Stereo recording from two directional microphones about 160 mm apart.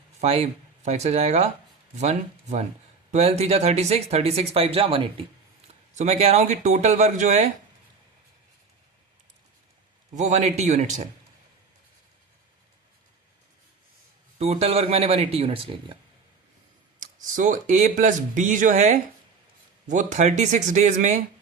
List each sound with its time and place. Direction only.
0.2 s speech: 40° right (ahead or behind)
10.2 s speech: 45° right (ahead or behind)
14.3 s speech: 40° right (ahead or behind)
17.0 s speech: 50° right (ahead or behind)